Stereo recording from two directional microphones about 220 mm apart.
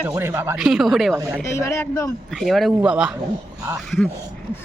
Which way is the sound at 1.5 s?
10° left (ahead or behind).